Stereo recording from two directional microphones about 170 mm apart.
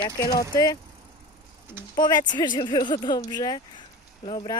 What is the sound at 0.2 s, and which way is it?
Speech, 20° left (ahead or behind).